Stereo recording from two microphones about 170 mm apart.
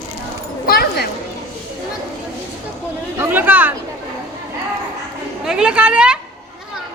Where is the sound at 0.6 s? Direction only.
65° left (ahead or behind).